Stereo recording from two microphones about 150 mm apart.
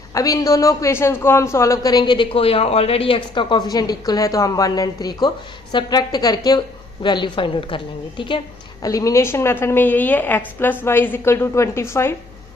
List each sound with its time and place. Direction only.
0.1 s a man's voice: 25° left (ahead or behind)
8.8 s a woman's voice: 25° left (ahead or behind)